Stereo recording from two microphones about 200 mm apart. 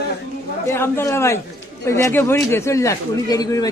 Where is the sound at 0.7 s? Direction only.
15° left (ahead or behind).